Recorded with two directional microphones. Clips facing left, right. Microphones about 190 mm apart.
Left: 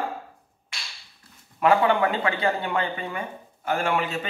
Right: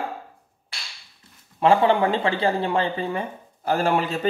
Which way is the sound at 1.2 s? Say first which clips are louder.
Even; 25° right (ahead or behind).